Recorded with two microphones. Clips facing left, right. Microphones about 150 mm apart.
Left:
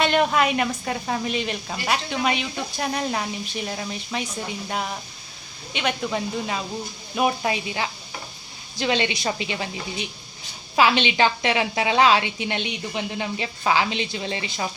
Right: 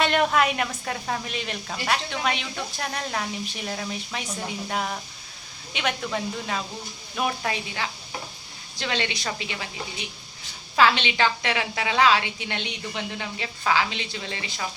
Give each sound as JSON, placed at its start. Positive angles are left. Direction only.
{"t": 0.0, "sound": "a woman's voice", "side_deg": 0}
{"t": 6.0, "sound": "speech", "side_deg": 10}
{"t": 10.8, "sound": "a woman's voice", "side_deg": 15}